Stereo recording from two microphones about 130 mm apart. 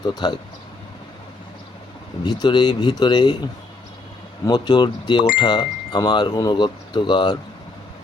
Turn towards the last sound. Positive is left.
turn(degrees=35)  # may be behind; listen again after turning